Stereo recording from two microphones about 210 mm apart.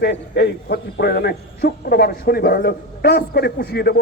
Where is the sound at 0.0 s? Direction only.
50° left (ahead or behind).